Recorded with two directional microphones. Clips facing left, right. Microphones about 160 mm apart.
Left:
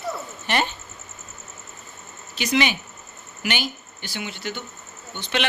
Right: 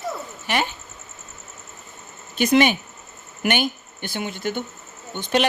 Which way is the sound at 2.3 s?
50° right (ahead or behind).